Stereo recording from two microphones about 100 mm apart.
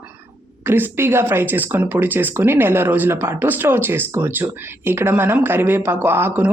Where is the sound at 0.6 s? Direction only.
20° right (ahead or behind).